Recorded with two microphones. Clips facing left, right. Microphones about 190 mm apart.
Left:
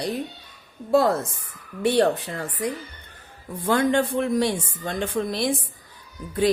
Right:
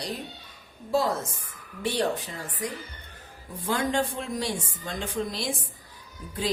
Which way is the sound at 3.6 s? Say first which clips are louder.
Left 6 dB; 60° left (ahead or behind).